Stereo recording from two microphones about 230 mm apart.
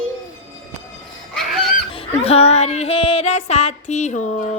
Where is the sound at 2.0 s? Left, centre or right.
Left.